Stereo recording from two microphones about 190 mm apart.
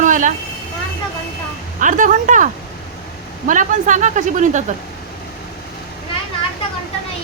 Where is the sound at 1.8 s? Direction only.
45° right (ahead or behind).